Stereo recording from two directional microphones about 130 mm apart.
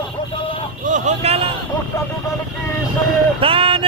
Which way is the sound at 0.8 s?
70° right (ahead or behind).